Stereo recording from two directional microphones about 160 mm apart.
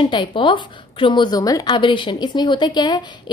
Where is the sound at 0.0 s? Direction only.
30° left (ahead or behind).